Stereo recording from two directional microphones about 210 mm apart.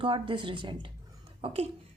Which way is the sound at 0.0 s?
25° right (ahead or behind).